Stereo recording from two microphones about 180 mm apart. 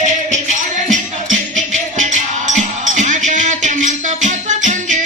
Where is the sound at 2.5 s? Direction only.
45° right (ahead or behind).